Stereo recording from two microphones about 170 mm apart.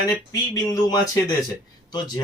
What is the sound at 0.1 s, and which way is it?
Speech, 20° left (ahead or behind).